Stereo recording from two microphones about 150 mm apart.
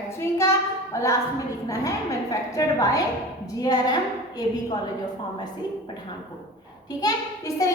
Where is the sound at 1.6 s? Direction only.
20° left (ahead or behind).